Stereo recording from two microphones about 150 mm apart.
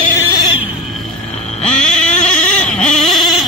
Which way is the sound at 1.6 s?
5° left (ahead or behind).